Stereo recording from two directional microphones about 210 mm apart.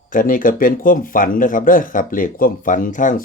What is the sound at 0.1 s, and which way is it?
Speech, 40° left (ahead or behind).